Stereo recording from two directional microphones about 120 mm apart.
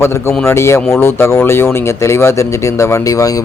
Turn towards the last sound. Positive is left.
turn(degrees=30)  # may be behind; listen again after turning